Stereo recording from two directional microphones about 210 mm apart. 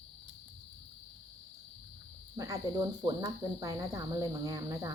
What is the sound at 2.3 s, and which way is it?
Speech, 15° right (ahead or behind).